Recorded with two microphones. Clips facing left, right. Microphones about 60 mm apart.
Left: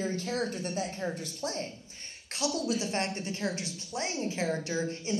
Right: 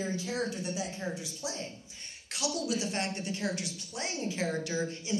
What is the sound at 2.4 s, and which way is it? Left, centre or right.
A woman's voice, left.